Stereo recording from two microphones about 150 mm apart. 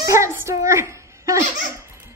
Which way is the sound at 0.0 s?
20° right (ahead or behind).